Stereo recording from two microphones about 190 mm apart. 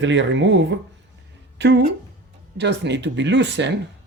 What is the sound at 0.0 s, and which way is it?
Speech, 70° right (ahead or behind).